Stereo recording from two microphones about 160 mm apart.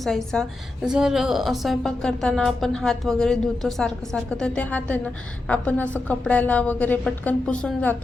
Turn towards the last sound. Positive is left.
turn(degrees=10)  # may be behind; listen again after turning